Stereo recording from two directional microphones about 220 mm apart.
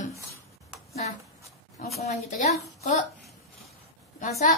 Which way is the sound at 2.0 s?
35° left (ahead or behind).